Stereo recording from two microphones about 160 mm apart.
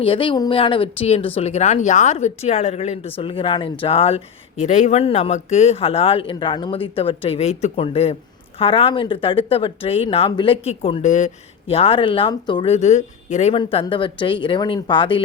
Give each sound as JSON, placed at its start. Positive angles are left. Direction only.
{"t": 0.0, "sound": "speech", "side_deg": 35}
{"t": 11.7, "sound": "speech", "side_deg": 35}
{"t": 12.7, "sound": "speech", "side_deg": 45}
{"t": 13.5, "sound": "speech", "side_deg": 35}